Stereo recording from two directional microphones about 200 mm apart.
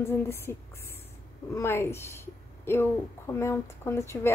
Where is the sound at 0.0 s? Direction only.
10° left (ahead or behind).